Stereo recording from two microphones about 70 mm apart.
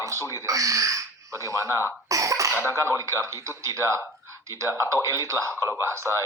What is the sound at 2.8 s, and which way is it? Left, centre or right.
Speech, right.